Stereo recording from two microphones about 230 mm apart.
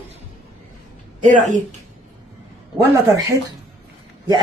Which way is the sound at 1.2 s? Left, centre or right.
Right.